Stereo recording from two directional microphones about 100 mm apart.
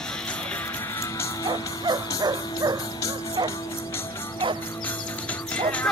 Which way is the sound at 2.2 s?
40° right (ahead or behind).